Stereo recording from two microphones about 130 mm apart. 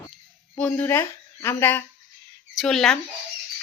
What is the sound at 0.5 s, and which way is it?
A woman's voice, 10° left (ahead or behind).